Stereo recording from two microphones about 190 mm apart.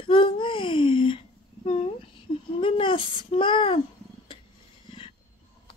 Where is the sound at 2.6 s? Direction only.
25° left (ahead or behind).